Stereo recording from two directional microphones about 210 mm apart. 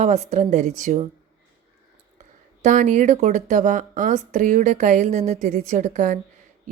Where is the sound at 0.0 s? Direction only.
30° right (ahead or behind).